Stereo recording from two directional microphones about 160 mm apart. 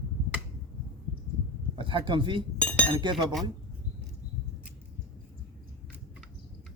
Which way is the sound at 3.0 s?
30° right (ahead or behind).